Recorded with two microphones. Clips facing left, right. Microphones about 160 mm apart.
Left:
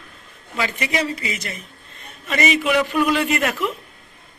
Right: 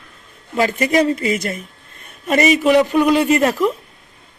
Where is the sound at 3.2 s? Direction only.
35° right (ahead or behind).